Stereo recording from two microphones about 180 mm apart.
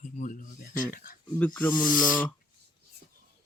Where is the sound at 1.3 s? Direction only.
10° left (ahead or behind).